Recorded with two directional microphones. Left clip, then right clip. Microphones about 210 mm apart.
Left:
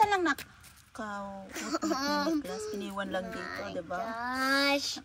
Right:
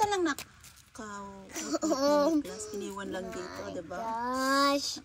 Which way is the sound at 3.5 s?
30° right (ahead or behind).